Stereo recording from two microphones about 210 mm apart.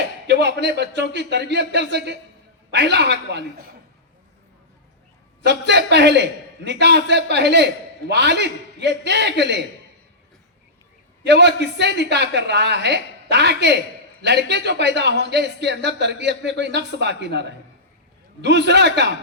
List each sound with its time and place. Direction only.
0.3 s a man's voice: 55° right (ahead or behind)
5.4 s a man's voice: 55° right (ahead or behind)
11.3 s a man's voice: 55° right (ahead or behind)
18.4 s a man's voice: 55° right (ahead or behind)